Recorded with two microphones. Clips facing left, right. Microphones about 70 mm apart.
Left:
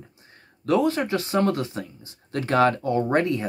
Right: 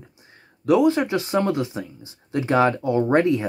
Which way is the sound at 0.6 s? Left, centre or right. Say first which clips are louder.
Right 4 dB; centre.